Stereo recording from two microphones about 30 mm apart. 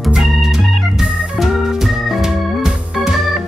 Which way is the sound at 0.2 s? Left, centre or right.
Centre.